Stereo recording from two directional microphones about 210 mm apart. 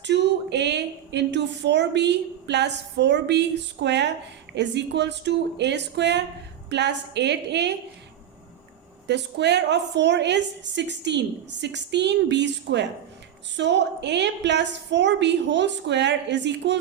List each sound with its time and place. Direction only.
0.0 s a woman's voice: 55° right (ahead or behind)
9.0 s a woman's voice: 55° right (ahead or behind)